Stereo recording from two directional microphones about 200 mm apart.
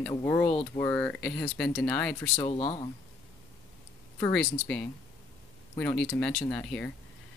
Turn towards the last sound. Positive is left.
turn(degrees=5)  # may be behind; listen again after turning